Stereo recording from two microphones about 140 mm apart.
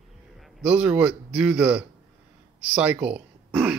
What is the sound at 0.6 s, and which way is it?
Speech, 10° right (ahead or behind).